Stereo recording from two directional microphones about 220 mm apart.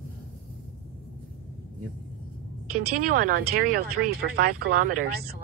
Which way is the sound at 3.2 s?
40° right (ahead or behind).